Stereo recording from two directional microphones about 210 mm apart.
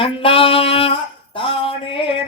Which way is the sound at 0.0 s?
25° left (ahead or behind).